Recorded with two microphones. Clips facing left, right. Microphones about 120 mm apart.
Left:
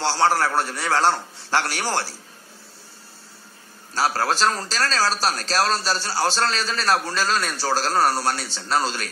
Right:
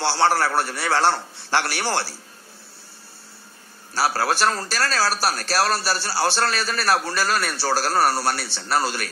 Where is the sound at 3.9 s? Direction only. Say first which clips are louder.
Even; 10° right (ahead or behind).